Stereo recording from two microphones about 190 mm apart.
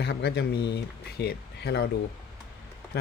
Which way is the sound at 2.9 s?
60° left (ahead or behind).